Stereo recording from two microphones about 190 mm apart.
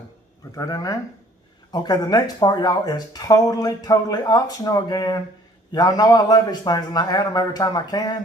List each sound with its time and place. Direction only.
0.5 s speech: 20° left (ahead or behind)